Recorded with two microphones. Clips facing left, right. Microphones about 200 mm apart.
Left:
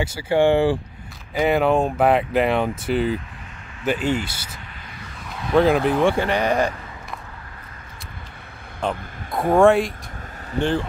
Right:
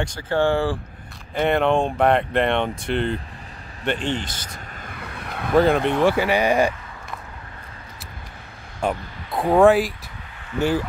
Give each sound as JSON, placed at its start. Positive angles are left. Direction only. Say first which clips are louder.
{"t": 0.0, "sound": "speech", "louder": "left 3 dB", "side_deg": 10}
{"t": 1.3, "sound": "speech", "louder": "left 1 dB", "side_deg": 5}
{"t": 4.8, "sound": "vehicle", "louder": "right 5 dB", "side_deg": -60}
{"t": 5.5, "sound": "speech", "louder": "left 1 dB", "side_deg": 0}
{"t": 8.8, "sound": "speech", "louder": "right 1 dB", "side_deg": 0}
{"t": 10.5, "sound": "speech", "louder": "even", "side_deg": 35}